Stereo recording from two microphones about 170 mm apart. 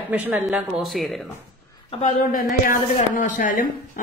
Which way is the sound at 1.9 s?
35° left (ahead or behind).